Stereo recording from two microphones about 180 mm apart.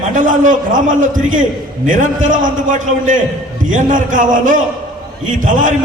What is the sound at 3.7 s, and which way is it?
A man's voice, 45° right (ahead or behind).